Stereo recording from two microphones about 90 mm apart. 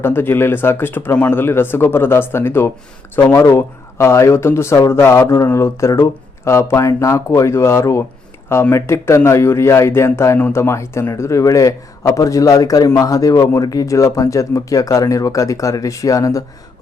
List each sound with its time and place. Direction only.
0.0 s speech: 25° left (ahead or behind)